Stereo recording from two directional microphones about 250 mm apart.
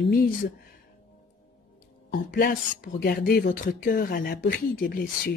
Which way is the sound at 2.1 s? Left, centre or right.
Left.